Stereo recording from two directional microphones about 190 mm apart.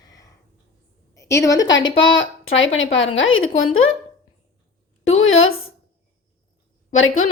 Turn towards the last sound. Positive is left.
turn(degrees=90)